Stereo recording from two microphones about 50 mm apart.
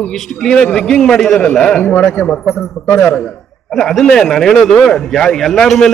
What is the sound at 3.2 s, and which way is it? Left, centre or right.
A man's voice, centre.